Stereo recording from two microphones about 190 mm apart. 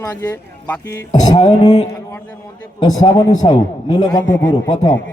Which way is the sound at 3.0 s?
20° left (ahead or behind).